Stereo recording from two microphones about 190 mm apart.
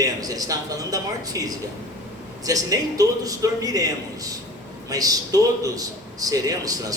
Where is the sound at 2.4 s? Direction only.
20° right (ahead or behind).